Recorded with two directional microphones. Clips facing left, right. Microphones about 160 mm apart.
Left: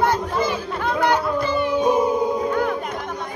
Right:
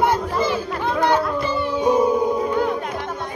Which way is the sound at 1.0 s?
10° left (ahead or behind).